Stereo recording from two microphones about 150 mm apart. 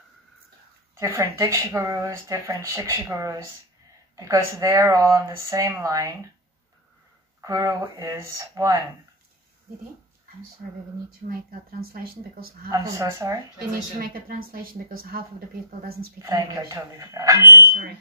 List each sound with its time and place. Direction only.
0.9 s speech: 20° right (ahead or behind)
7.4 s speech: 25° right (ahead or behind)
11.2 s speech: 65° right (ahead or behind)
11.8 s speech: 85° right
12.6 s speech: 20° right (ahead or behind)
13.9 s speech: 75° right (ahead or behind)
15.8 s speech: 90° right
16.2 s speech: 20° right (ahead or behind)
17.6 s speech: 90° right